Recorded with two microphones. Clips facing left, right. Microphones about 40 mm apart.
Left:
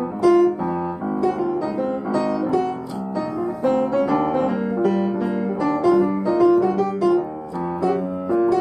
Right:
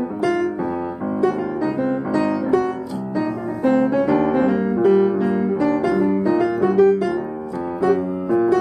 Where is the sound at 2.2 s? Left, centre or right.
Centre.